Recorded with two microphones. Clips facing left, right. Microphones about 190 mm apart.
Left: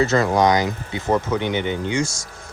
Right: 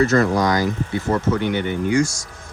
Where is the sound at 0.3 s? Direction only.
20° left (ahead or behind).